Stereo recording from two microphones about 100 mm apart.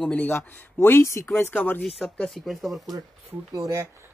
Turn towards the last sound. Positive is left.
turn(degrees=-35)  # may be behind; listen again after turning